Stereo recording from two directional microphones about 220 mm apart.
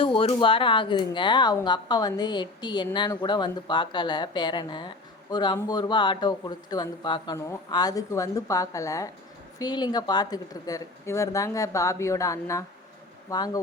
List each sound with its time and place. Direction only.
0.0 s speech: 25° left (ahead or behind)